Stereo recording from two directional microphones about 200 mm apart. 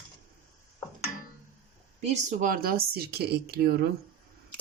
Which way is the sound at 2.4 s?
45° right (ahead or behind).